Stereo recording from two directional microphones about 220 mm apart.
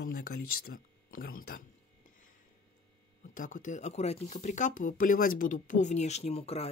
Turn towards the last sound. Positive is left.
turn(degrees=30)  # may be behind; listen again after turning